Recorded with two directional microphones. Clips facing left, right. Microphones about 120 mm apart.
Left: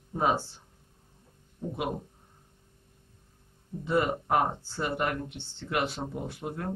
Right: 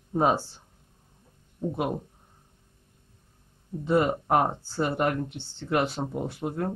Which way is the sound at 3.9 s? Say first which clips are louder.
Right 3 dB; 30° right (ahead or behind).